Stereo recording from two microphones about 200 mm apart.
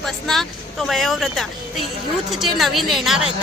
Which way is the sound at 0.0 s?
Centre (ahead or behind).